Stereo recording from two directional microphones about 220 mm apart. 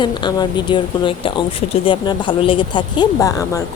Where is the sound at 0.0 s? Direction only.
20° left (ahead or behind).